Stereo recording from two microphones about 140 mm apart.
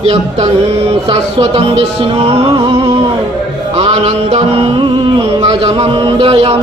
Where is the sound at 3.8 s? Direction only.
45° right (ahead or behind).